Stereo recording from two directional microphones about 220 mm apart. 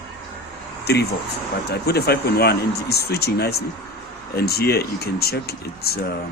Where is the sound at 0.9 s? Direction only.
45° left (ahead or behind).